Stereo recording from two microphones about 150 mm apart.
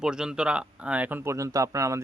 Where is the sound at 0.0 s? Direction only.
5° right (ahead or behind).